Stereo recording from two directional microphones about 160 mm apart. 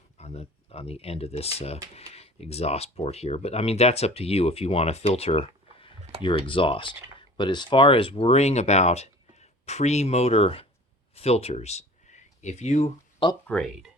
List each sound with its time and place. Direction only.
0.2 s speech: 40° left (ahead or behind)
13.5 s speech: centre (ahead or behind)